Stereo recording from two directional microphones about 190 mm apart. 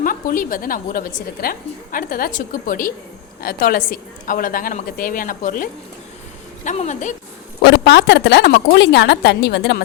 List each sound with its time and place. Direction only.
0.0 s a woman's voice: 45° left (ahead or behind)
6.7 s speech: 40° left (ahead or behind)
7.6 s a woman's voice: 65° left (ahead or behind)